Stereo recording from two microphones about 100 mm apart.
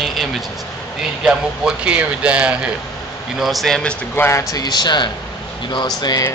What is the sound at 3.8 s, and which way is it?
Speech, 10° left (ahead or behind).